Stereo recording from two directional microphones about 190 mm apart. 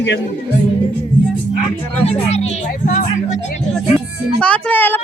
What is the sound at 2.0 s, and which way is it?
Speech, 35° left (ahead or behind).